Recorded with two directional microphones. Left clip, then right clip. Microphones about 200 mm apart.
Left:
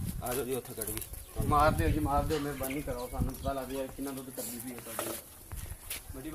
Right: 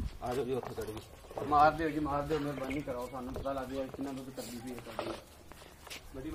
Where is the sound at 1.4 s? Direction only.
25° left (ahead or behind).